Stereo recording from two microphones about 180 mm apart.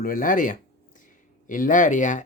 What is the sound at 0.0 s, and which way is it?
Speech, 50° left (ahead or behind).